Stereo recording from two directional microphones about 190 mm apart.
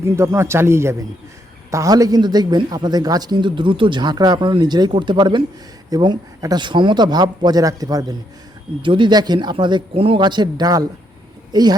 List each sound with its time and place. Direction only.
0.0 s a man's voice: 15° right (ahead or behind)